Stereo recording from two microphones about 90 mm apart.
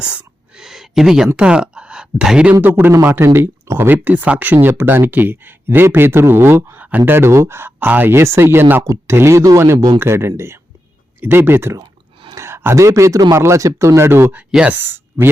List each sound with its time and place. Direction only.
0.0 s a sound: 10° right (ahead or behind)
1.4 s speech: 10° right (ahead or behind)
2.5 s speech: 20° right (ahead or behind)
2.9 s speech: 30° right (ahead or behind)
8.8 s speech: 35° right (ahead or behind)
14.5 s speech: 10° right (ahead or behind)
14.8 s speech: 25° right (ahead or behind)